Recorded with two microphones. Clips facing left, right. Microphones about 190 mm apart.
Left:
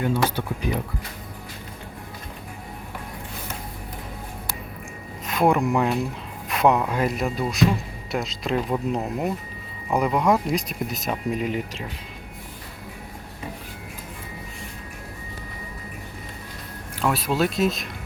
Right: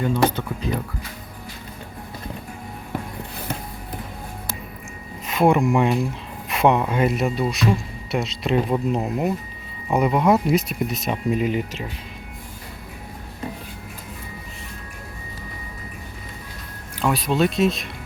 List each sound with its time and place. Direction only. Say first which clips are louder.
0.0 s speech: right 3 dB; 10° left (ahead or behind)
5.2 s speech: right 3 dB; centre (ahead or behind)
17.0 s speech: right 2 dB; centre (ahead or behind)